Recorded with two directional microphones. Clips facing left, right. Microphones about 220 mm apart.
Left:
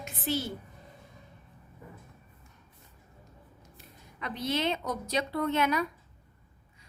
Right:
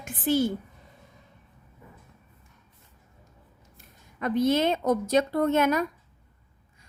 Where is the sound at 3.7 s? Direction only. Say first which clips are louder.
Left 2 dB; 50° right (ahead or behind).